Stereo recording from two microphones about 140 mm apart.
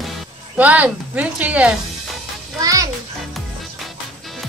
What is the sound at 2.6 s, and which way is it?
Speech, 25° right (ahead or behind).